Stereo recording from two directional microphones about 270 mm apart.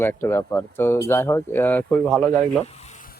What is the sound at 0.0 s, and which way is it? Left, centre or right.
Speech, centre.